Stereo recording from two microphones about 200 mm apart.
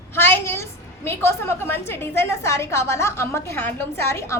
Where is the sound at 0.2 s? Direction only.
10° left (ahead or behind).